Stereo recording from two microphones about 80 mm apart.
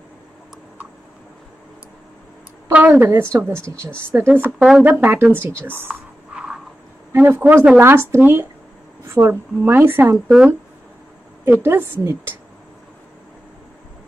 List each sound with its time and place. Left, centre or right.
2.7 s a woman's voice: right
4.3 s a woman's voice: right
4.6 s speech: centre
4.8 s a woman's voice: right
6.3 s a sound: centre
7.2 s a woman's voice: right
10.1 s speech: centre
11.4 s a woman's voice: right